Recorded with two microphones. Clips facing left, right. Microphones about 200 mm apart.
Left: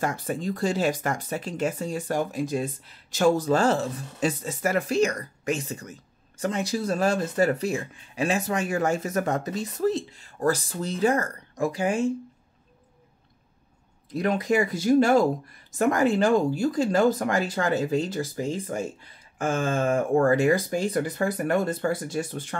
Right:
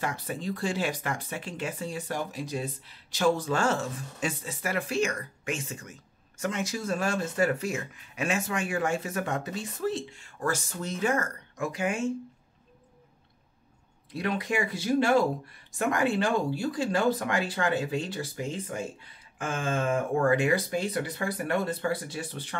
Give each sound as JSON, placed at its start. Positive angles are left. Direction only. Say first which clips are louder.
{"t": 0.0, "sound": "speech", "louder": "left 5 dB", "side_deg": 45}
{"t": 14.1, "sound": "speech", "louder": "left 6 dB", "side_deg": 45}